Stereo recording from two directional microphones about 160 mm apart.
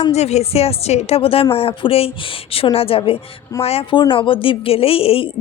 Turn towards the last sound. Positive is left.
turn(degrees=35)  # may be behind; listen again after turning